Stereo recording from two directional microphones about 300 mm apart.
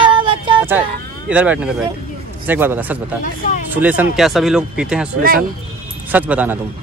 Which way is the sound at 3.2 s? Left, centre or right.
Left.